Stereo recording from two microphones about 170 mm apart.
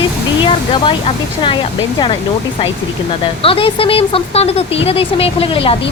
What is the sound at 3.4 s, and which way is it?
A woman's voice, 30° left (ahead or behind).